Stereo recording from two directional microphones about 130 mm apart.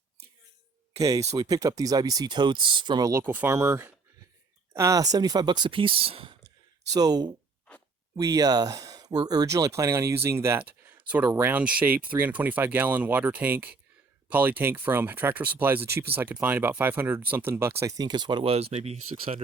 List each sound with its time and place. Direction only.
0.9 s speech: 25° right (ahead or behind)
3.1 s speech: 20° right (ahead or behind); by 6.3 s 45° right (ahead or behind)
6.9 s speech: 30° right (ahead or behind); by 19.4 s 50° right (ahead or behind)